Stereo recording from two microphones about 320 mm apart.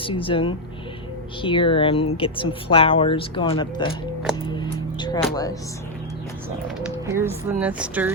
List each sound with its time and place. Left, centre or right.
0.0 s speech: centre
4.4 s music: centre
5.3 s speech: centre
7.1 s speech: centre